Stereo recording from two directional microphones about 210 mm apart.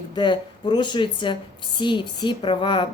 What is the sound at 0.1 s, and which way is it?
Speech, 20° left (ahead or behind).